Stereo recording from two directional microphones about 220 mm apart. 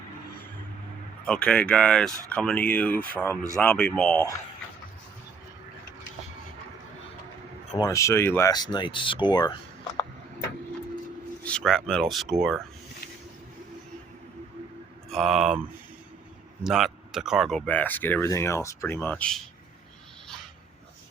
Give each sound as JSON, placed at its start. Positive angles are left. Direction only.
{"t": 1.2, "sound": "speech", "side_deg": 5}
{"t": 7.8, "sound": "speech", "side_deg": 15}
{"t": 11.4, "sound": "speech", "side_deg": 5}
{"t": 15.1, "sound": "speech", "side_deg": 0}
{"t": 16.6, "sound": "speech", "side_deg": 0}